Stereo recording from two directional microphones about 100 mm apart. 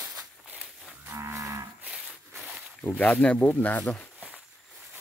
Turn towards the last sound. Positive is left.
turn(degrees=15)  # may be behind; listen again after turning